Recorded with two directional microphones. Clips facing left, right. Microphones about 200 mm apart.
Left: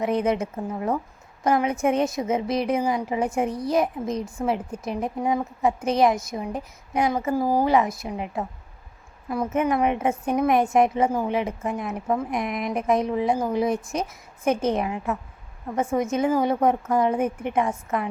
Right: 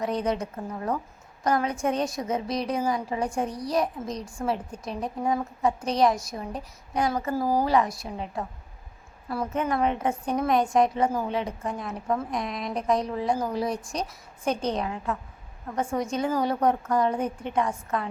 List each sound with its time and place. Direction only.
0.0 s a woman's voice: 25° left (ahead or behind)
5.8 s a woman's voice: 5° left (ahead or behind)